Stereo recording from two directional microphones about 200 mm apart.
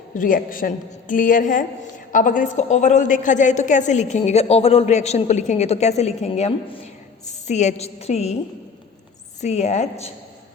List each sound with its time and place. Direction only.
0.1 s a woman's voice: 40° left (ahead or behind)
9.4 s a woman's voice: 35° left (ahead or behind)